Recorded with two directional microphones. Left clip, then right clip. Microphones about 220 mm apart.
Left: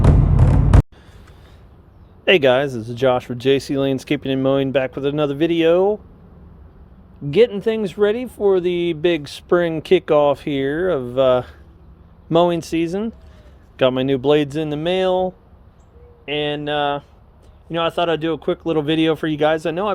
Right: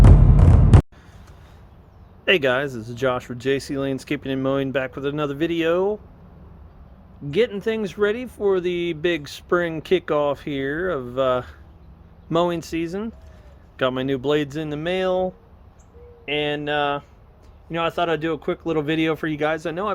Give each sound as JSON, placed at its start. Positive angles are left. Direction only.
{"t": 2.2, "sound": "speech", "side_deg": 25}
{"t": 7.3, "sound": "speech", "side_deg": 25}